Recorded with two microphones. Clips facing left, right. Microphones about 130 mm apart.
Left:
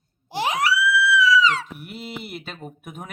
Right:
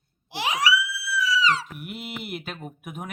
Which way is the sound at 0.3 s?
45° left (ahead or behind).